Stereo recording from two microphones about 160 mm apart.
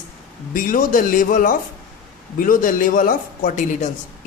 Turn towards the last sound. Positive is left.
turn(degrees=50)  # may be behind; listen again after turning